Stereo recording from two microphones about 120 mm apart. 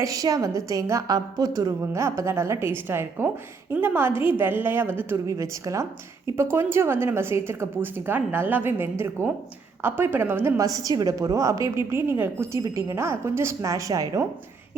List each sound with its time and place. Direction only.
0.0 s a woman's voice: 30° right (ahead or behind)
10.6 s a woman's voice: 30° right (ahead or behind)